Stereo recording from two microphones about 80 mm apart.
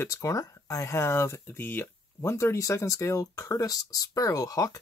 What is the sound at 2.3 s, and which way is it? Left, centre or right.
Speech, left.